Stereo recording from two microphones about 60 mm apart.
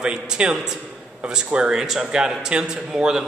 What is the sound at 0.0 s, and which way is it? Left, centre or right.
A man's voice, centre.